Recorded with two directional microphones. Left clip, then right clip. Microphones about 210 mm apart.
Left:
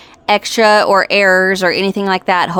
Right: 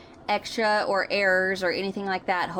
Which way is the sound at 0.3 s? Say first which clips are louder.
Left 14 dB; 50° left (ahead or behind).